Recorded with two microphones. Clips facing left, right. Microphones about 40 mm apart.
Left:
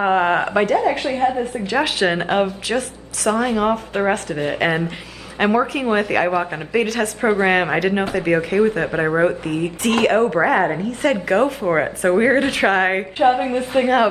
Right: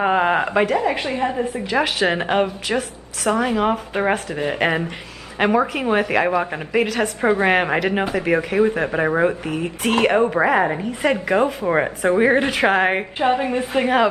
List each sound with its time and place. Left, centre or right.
0.0 s speech: centre
1.2 s a woman's voice: centre
1.7 s speech: centre
10.9 s a woman's voice: centre